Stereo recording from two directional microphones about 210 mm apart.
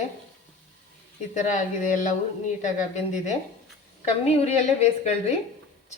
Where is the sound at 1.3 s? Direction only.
35° left (ahead or behind).